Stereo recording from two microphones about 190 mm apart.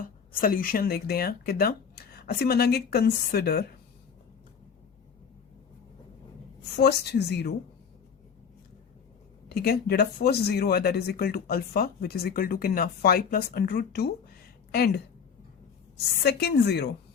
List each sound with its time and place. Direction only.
0.0 s speech: 50° left (ahead or behind)
6.7 s speech: 60° left (ahead or behind)
9.5 s speech: 55° left (ahead or behind)
16.2 s speech: 60° left (ahead or behind)